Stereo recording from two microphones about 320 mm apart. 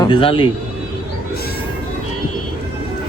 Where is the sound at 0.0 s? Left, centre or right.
Centre.